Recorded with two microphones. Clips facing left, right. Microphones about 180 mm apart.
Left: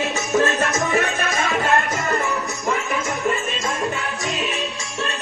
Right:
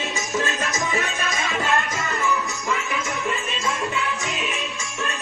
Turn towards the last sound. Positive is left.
turn(degrees=45)  # may be behind; listen again after turning